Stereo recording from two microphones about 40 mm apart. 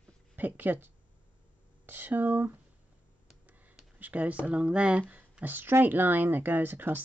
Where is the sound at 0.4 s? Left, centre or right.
Right.